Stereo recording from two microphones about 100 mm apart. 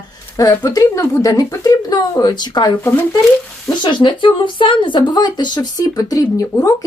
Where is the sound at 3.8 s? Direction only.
50° left (ahead or behind).